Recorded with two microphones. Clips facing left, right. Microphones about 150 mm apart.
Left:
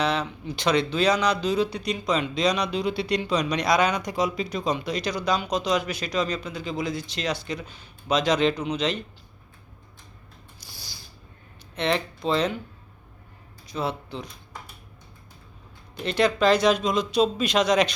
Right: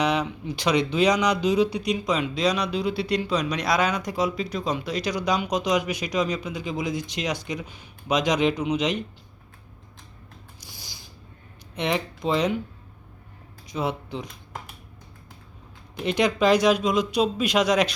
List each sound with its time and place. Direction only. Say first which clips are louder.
0.0 s speech: right 2 dB; 15° right (ahead or behind)
10.6 s creak: left 1 dB; 20° right (ahead or behind)
11.7 s speech: left 1 dB; 15° right (ahead or behind)
13.7 s speech: right 1 dB; 15° right (ahead or behind)
16.0 s speech: even; 15° right (ahead or behind)